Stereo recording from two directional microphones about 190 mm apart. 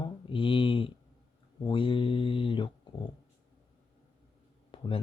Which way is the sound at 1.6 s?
25° left (ahead or behind).